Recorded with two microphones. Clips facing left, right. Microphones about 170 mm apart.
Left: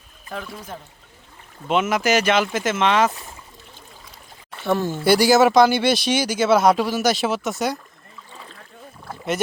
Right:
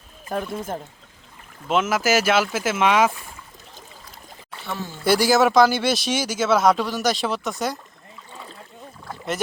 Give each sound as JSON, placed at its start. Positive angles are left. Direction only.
{"t": 0.3, "sound": "speech", "side_deg": -45}
{"t": 1.6, "sound": "speech", "side_deg": 0}
{"t": 4.6, "sound": "speech", "side_deg": 55}
{"t": 5.0, "sound": "speech", "side_deg": 0}